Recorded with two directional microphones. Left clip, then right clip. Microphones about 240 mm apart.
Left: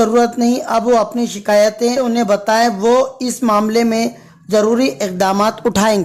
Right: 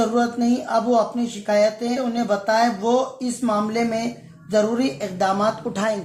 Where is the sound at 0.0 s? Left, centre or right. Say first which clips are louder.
Left 8 dB; left.